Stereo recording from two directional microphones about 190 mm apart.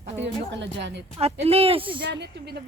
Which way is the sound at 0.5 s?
70° right (ahead or behind).